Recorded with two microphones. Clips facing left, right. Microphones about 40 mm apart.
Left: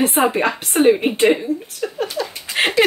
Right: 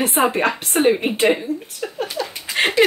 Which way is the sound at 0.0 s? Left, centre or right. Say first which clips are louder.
Left 1 dB; centre.